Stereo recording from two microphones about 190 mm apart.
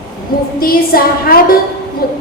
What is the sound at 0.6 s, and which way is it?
Speech, 50° left (ahead or behind).